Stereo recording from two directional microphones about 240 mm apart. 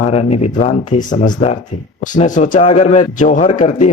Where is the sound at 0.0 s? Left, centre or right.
Left.